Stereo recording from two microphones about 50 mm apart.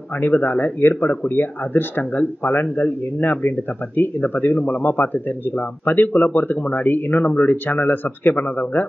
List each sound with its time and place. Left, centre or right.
0.2 s speech: left